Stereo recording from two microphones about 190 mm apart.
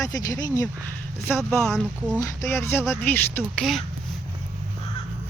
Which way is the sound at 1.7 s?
5° right (ahead or behind).